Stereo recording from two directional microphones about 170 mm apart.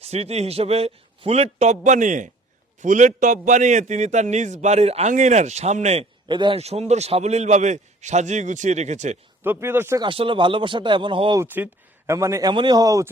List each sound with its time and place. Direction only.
0.0 s a man's voice: 40° right (ahead or behind)
9.4 s speech: 15° right (ahead or behind)
10.0 s speech: 30° right (ahead or behind)
11.3 s speech: 10° right (ahead or behind)